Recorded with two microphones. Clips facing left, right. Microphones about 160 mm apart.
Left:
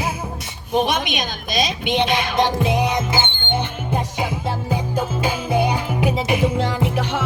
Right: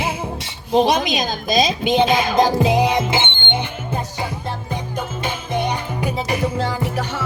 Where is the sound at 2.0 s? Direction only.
40° right (ahead or behind).